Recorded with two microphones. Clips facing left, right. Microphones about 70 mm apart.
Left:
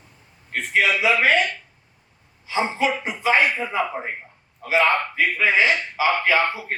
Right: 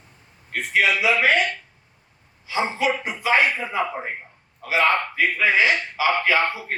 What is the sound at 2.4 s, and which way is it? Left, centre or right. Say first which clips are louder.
Speech: left 1 dB; left.